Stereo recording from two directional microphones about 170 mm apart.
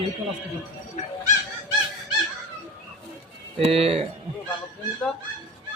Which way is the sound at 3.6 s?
35° right (ahead or behind).